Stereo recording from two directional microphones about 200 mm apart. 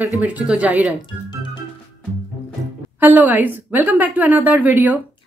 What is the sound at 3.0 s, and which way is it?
A woman's voice, 10° right (ahead or behind).